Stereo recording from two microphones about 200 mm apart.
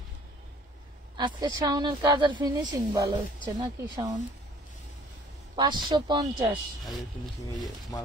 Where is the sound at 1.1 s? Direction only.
20° right (ahead or behind).